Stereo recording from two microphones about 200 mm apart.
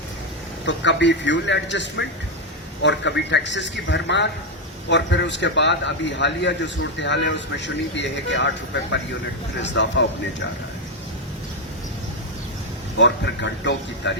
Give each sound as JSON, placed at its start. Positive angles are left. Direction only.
{"t": 0.6, "sound": "a man's voice", "side_deg": 65}
{"t": 13.0, "sound": "a man's voice", "side_deg": 65}